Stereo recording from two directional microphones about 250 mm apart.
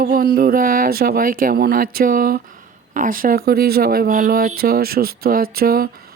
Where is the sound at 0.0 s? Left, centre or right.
Right.